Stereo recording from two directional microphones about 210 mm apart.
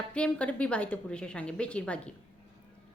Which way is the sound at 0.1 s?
5° left (ahead or behind).